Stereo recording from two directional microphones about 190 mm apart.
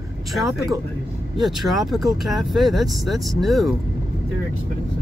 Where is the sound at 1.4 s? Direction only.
Centre (ahead or behind).